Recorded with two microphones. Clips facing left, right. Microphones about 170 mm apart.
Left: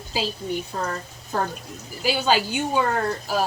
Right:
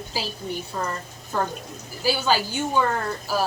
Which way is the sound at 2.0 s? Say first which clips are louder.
Left 1 dB; 15° left (ahead or behind).